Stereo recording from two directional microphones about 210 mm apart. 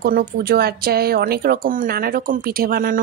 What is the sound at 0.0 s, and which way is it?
Speech, 45° right (ahead or behind).